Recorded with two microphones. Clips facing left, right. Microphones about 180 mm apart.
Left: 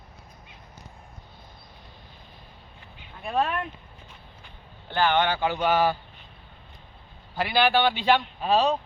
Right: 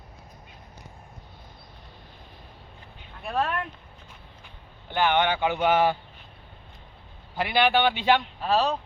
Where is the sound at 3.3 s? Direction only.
5° left (ahead or behind).